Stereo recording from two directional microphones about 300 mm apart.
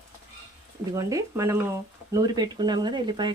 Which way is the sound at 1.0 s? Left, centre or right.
Centre.